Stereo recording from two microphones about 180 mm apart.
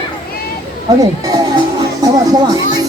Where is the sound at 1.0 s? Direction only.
20° right (ahead or behind).